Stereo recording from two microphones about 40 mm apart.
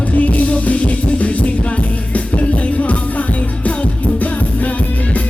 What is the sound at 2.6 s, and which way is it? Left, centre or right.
Music, left.